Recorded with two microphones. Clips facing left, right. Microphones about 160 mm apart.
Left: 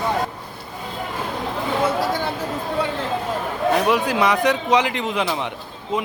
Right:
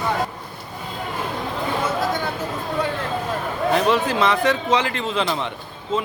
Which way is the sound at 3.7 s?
10° left (ahead or behind).